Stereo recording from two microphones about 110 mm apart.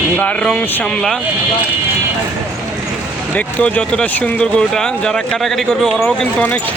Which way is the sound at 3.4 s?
10° left (ahead or behind).